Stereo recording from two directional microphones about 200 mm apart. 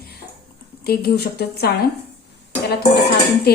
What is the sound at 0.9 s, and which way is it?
Speech, 50° left (ahead or behind).